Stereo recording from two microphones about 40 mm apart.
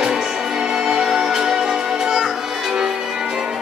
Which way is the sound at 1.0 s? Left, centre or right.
Centre.